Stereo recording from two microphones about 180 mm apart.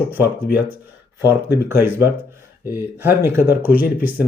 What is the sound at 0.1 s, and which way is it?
Speech, 10° right (ahead or behind).